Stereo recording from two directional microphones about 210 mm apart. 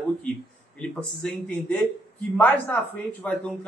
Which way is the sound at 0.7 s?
5° left (ahead or behind).